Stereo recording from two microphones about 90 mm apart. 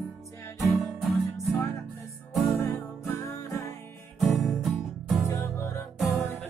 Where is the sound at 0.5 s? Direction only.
Centre (ahead or behind).